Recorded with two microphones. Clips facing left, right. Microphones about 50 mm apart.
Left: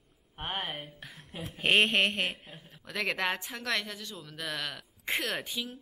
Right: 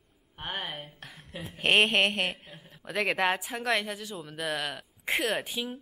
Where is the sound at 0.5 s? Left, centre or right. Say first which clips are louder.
Even; left.